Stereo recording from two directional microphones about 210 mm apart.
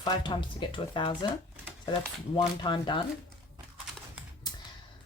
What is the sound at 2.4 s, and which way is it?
Speech, 20° left (ahead or behind).